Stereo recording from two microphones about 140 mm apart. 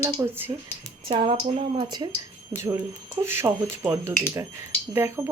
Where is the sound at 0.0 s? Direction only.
20° right (ahead or behind).